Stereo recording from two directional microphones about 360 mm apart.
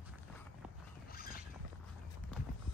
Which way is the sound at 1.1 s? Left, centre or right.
Left.